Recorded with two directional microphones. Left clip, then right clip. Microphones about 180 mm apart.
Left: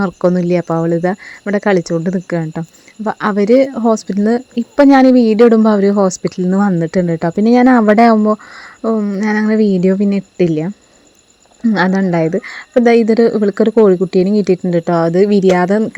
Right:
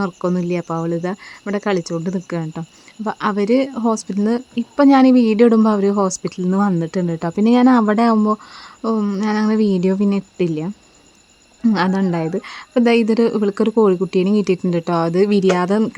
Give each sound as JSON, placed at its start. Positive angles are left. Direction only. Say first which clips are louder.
{"t": 0.0, "sound": "speech", "louder": "left 7 dB", "side_deg": 25}
{"t": 9.2, "sound": "speech", "louder": "left 5 dB", "side_deg": 20}
{"t": 11.7, "sound": "speech", "louder": "left 5 dB", "side_deg": 20}